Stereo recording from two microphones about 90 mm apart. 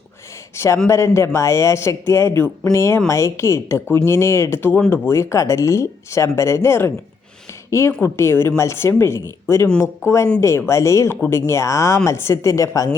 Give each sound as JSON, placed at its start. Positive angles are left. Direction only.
{"t": 0.5, "sound": "speech", "side_deg": 30}